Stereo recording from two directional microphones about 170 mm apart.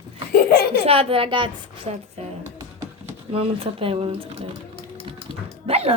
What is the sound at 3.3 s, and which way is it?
Speech, 35° right (ahead or behind).